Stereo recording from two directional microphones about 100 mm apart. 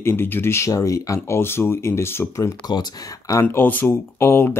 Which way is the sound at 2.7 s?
40° left (ahead or behind).